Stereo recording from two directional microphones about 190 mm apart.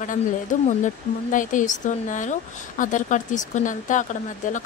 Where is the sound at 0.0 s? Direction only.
40° left (ahead or behind).